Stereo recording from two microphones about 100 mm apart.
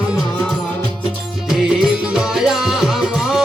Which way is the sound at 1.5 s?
5° right (ahead or behind).